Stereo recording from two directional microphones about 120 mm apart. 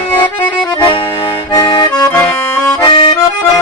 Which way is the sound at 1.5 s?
35° left (ahead or behind).